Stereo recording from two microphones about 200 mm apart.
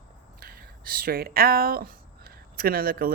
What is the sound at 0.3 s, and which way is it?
A woman's voice, 50° right (ahead or behind).